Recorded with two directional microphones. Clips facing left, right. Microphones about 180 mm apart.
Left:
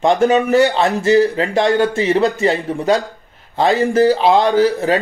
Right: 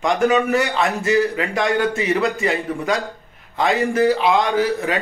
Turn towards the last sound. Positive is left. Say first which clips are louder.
# left 6 dB
turn(degrees=35)  # may be behind; listen again after turning